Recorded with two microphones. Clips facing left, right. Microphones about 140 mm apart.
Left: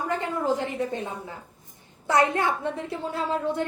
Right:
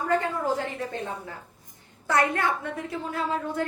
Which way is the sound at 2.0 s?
20° left (ahead or behind).